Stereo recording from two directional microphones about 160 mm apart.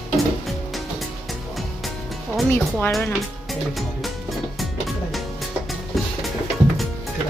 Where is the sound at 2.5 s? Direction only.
15° left (ahead or behind).